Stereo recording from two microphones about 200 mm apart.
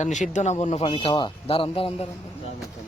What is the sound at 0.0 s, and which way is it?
Speech, 35° left (ahead or behind).